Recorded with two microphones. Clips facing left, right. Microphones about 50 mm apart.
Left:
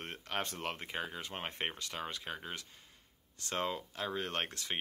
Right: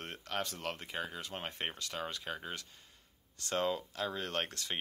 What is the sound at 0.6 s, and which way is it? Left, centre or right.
Speech, centre.